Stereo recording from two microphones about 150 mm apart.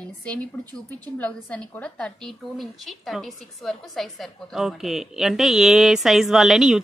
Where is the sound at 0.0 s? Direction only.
10° left (ahead or behind).